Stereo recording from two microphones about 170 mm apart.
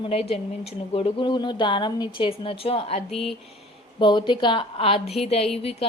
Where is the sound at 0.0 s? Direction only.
35° left (ahead or behind).